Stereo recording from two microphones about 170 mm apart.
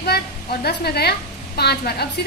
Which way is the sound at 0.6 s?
70° left (ahead or behind).